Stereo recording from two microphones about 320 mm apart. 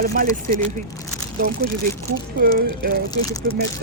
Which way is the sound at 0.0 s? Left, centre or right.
Right.